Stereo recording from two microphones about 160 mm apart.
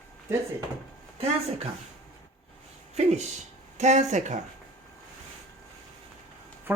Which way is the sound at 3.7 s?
45° right (ahead or behind).